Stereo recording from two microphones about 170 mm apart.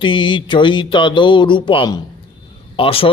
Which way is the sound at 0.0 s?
30° left (ahead or behind).